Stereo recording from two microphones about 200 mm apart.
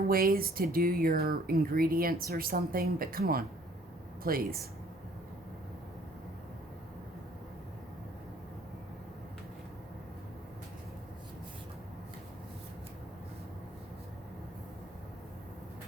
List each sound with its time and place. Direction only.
0.1 s speech: 45° right (ahead or behind)